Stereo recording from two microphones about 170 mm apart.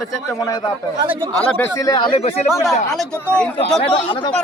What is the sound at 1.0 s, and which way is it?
Speech, 30° right (ahead or behind).